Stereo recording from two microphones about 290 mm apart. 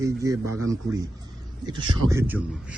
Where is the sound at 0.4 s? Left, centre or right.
Right.